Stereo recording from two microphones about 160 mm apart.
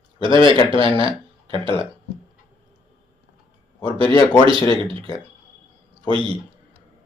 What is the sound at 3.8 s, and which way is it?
A man's voice, 35° right (ahead or behind).